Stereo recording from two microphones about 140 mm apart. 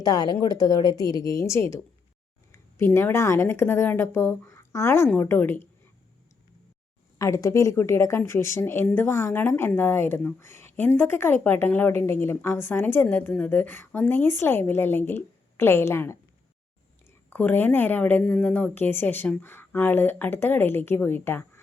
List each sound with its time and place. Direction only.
0.0 s a woman's voice: 25° left (ahead or behind)
7.2 s speech: 20° left (ahead or behind)
17.2 s speech: 10° left (ahead or behind)